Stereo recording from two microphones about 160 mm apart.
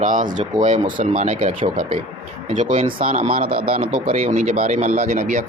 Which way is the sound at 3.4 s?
65° right (ahead or behind).